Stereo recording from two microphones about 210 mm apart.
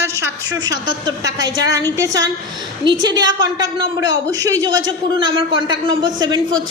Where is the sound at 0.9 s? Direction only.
20° right (ahead or behind).